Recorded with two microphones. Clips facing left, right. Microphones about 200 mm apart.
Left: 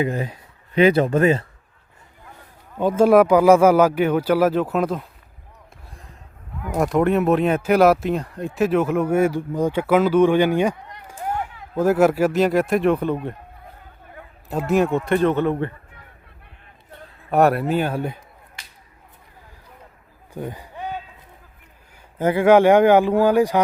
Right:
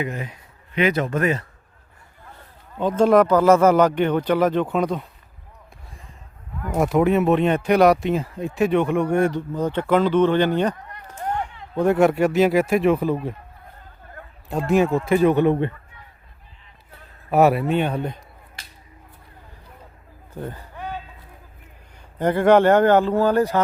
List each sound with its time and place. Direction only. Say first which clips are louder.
0.0 s speech: left 5 dB; 35° left (ahead or behind)
2.2 s a man's voice: even; 10° left (ahead or behind)
6.7 s a man's voice: even; centre (ahead or behind); by 15.7 s 20° right (ahead or behind)
17.3 s speech: even; centre (ahead or behind)
20.3 s a sound: left 2 dB; 15° left (ahead or behind)
21.9 s speech: left 1 dB; 5° left (ahead or behind)